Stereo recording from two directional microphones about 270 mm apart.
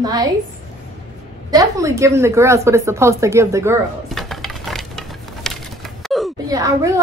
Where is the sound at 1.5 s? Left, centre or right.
Centre.